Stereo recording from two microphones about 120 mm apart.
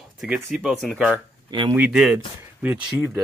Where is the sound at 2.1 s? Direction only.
15° right (ahead or behind).